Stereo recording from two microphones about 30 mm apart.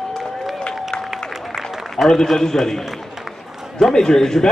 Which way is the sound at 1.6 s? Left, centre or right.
Centre.